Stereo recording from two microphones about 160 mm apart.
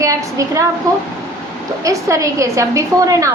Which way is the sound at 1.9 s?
20° right (ahead or behind).